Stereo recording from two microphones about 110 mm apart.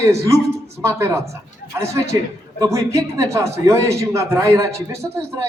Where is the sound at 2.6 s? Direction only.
30° right (ahead or behind).